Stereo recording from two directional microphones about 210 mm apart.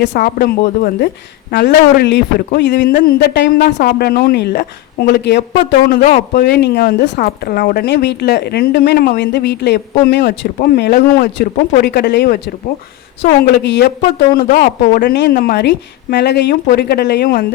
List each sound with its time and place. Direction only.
0.0 s a woman's voice: 50° left (ahead or behind)
13.6 s a woman's voice: 55° left (ahead or behind)